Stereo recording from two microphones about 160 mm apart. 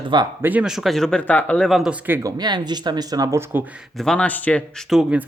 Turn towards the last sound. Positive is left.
turn(degrees=-5)  # may be behind; listen again after turning